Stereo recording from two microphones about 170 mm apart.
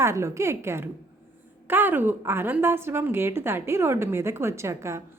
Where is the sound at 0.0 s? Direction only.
15° right (ahead or behind).